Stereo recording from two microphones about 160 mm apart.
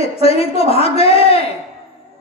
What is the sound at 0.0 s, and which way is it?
A woman's voice, 40° left (ahead or behind).